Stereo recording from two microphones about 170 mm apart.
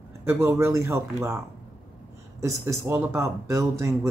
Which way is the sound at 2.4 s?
15° right (ahead or behind).